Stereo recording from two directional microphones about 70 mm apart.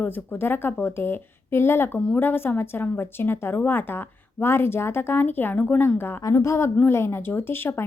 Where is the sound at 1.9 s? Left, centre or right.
Left.